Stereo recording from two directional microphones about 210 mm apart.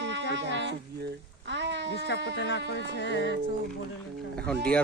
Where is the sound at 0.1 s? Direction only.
60° right (ahead or behind).